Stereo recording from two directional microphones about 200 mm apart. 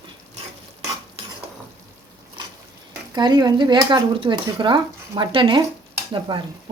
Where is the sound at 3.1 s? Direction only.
20° right (ahead or behind).